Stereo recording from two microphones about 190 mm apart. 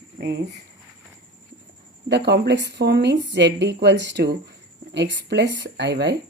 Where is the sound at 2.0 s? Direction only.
60° right (ahead or behind).